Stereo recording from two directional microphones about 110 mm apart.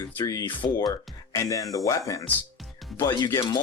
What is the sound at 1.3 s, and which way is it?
Speech, 30° left (ahead or behind).